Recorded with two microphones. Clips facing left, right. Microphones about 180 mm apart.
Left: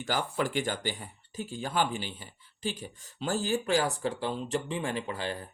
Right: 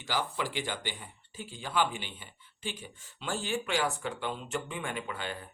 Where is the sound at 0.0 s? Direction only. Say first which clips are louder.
Left 3 dB; 50° left (ahead or behind).